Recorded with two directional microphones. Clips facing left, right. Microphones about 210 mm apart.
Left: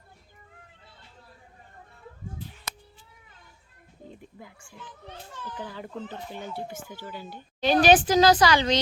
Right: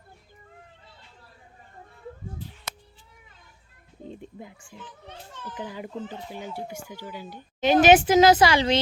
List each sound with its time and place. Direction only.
4.1 s a child's voice: 25° right (ahead or behind)